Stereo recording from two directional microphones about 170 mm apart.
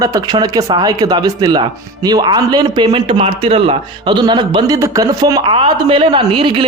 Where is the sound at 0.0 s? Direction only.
20° right (ahead or behind).